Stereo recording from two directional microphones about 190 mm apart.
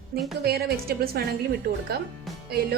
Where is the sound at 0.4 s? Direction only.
55° right (ahead or behind).